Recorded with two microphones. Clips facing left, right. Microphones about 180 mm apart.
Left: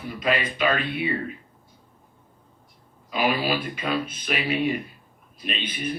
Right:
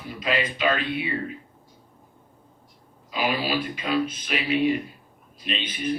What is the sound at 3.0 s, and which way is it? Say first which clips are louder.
Speech: left 2 dB; 50° left (ahead or behind).